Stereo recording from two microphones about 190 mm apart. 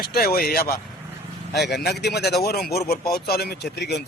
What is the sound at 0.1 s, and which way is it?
A man's voice, 50° left (ahead or behind).